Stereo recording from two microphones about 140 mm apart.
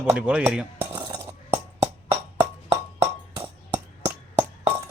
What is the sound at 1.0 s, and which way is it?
Chink, 30° right (ahead or behind).